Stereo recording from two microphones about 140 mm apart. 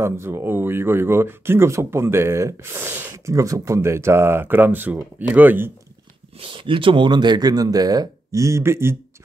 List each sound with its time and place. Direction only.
0.0 s speech: 15° right (ahead or behind)
6.4 s speech: 40° right (ahead or behind); by 8.9 s 20° right (ahead or behind)